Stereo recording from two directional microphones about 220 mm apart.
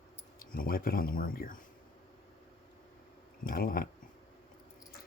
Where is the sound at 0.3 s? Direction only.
40° left (ahead or behind).